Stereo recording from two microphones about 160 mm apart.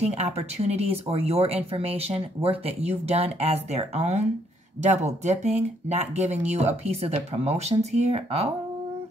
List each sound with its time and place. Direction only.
0.0 s speech: 40° right (ahead or behind)